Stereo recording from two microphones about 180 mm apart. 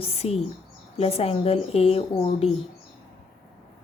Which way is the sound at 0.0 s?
35° left (ahead or behind).